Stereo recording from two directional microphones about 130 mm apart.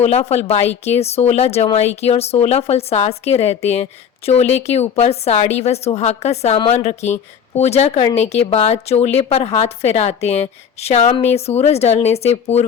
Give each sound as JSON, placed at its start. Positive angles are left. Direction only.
{"t": 0.0, "sound": "a woman's voice", "side_deg": 55}